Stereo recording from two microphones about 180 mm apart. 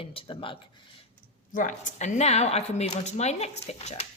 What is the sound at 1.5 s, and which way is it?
A woman's voice, 45° left (ahead or behind).